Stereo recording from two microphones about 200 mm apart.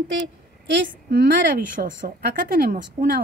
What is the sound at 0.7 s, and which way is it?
A woman's voice, 50° right (ahead or behind).